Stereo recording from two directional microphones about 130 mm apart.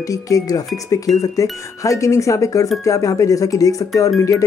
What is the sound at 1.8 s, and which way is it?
Speech, 25° left (ahead or behind).